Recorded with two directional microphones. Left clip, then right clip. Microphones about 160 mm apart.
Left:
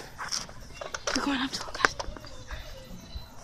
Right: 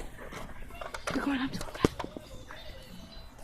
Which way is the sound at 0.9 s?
10° left (ahead or behind).